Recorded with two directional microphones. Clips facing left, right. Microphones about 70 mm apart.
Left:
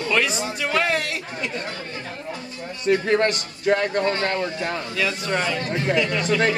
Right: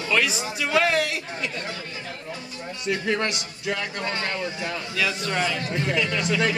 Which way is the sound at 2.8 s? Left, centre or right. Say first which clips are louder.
Left 6 dB; left.